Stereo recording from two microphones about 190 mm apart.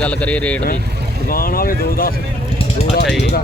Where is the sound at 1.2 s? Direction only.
50° left (ahead or behind).